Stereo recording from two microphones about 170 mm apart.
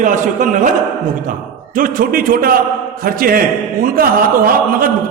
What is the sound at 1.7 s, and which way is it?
A man's voice, 55° right (ahead or behind).